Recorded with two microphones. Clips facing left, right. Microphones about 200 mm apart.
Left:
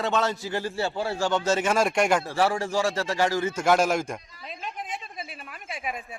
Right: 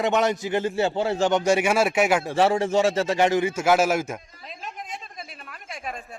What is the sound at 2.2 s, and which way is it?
A man's voice, 20° right (ahead or behind).